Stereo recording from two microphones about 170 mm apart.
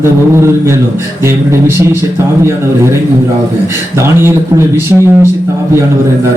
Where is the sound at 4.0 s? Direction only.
15° right (ahead or behind).